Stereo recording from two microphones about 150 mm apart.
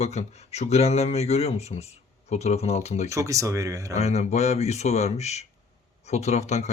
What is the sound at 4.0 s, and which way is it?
Speech, 45° left (ahead or behind).